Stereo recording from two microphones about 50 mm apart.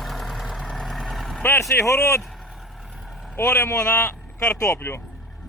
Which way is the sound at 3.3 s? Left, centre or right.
Left.